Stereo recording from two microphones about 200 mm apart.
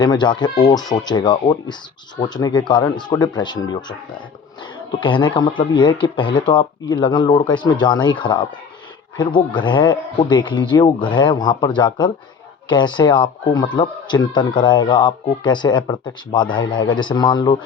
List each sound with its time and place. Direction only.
0.0 s speech: 20° left (ahead or behind)
9.5 s speech: 25° left (ahead or behind)